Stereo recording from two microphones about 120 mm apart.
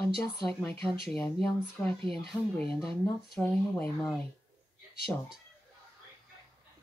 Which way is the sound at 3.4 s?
15° left (ahead or behind).